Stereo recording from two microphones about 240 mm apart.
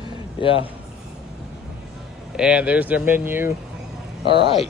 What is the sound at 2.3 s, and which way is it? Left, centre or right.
Speech, centre.